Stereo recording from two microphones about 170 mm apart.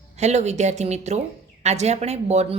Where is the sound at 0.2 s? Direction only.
40° right (ahead or behind).